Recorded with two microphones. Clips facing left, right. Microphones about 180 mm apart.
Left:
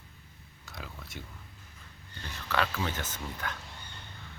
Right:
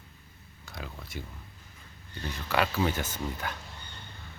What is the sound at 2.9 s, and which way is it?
Speech, 10° right (ahead or behind).